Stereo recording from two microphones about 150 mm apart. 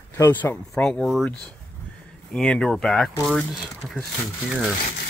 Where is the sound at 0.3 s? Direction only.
10° left (ahead or behind).